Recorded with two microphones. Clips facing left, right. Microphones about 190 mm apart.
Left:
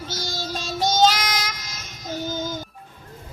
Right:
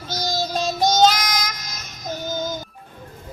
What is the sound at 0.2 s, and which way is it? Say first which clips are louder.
Music: right 10 dB; 45° right (ahead or behind).